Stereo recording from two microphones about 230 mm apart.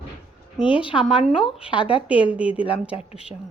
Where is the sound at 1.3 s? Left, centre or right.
Centre.